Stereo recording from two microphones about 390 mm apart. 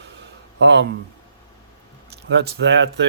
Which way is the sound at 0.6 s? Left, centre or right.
Right.